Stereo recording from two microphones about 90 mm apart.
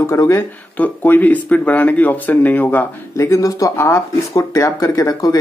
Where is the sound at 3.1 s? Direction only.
35° left (ahead or behind).